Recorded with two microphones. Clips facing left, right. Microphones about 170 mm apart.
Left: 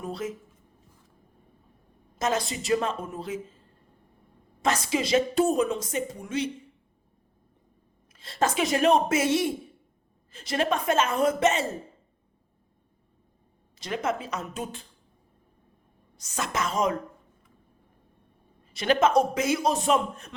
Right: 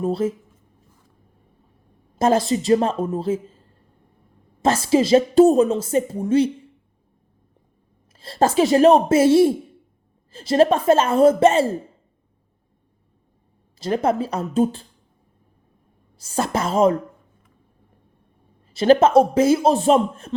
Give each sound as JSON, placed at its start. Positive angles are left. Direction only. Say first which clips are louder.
{"t": 0.0, "sound": "a man's voice", "louder": "right 11 dB", "side_deg": -30}
{"t": 2.1, "sound": "a woman's voice", "louder": "right 10 dB", "side_deg": -30}
{"t": 4.6, "sound": "a woman's voice", "louder": "right 9 dB", "side_deg": -30}
{"t": 8.1, "sound": "a woman's voice", "louder": "right 8 dB", "side_deg": -30}
{"t": 13.7, "sound": "a woman's voice", "louder": "right 9 dB", "side_deg": -30}
{"t": 16.1, "sound": "a woman's voice", "louder": "right 8 dB", "side_deg": -30}
{"t": 18.8, "sound": "a man's voice", "louder": "right 8 dB", "side_deg": -30}